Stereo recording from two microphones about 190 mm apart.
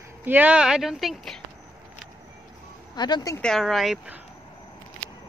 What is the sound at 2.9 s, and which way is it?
Speech, 20° left (ahead or behind).